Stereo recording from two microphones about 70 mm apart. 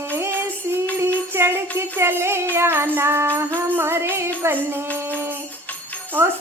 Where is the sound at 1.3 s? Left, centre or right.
Right.